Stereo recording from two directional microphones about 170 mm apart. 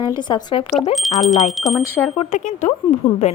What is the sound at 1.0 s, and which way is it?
Speech, centre (ahead or behind).